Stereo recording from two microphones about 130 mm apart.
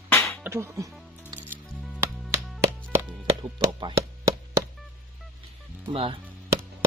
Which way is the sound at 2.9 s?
20° right (ahead or behind).